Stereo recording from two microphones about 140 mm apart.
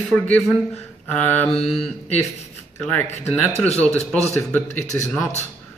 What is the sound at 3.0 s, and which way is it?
Speech, 55° left (ahead or behind).